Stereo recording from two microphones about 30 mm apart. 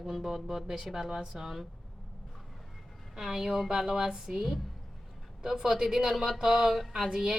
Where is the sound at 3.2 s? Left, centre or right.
Centre.